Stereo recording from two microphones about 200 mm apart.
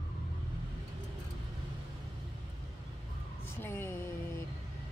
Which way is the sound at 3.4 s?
10° left (ahead or behind).